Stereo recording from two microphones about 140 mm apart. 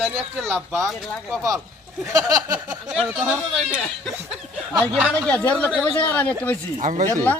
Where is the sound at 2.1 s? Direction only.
25° right (ahead or behind).